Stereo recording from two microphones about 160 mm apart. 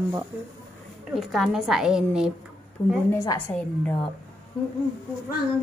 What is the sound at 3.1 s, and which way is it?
Speech, 20° left (ahead or behind).